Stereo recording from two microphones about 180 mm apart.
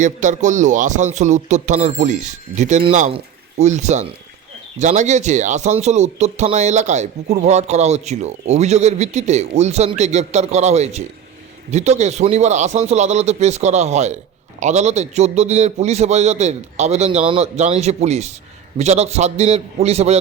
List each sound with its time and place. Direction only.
0.0 s speech: 45° right (ahead or behind)